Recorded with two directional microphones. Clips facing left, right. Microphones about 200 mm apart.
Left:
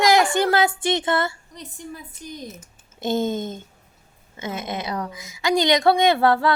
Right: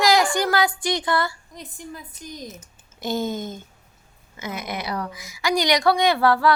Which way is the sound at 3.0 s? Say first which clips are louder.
Left 3 dB; 25° left (ahead or behind).